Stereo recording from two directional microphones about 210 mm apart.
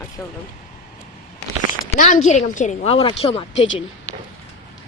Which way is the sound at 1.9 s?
40° left (ahead or behind).